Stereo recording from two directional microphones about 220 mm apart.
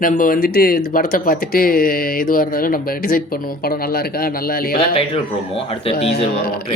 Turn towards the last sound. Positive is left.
turn(degrees=25)  # may be behind; listen again after turning